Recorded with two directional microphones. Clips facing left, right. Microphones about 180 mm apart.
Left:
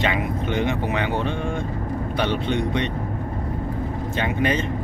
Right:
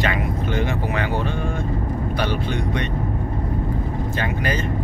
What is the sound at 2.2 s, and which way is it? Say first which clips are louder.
Speech: left 2 dB; 25° left (ahead or behind).